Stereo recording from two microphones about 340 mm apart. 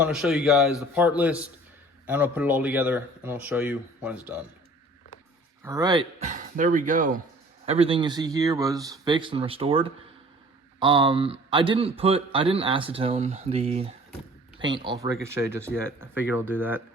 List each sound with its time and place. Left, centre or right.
0.0 s speech: centre
5.6 s a man's voice: centre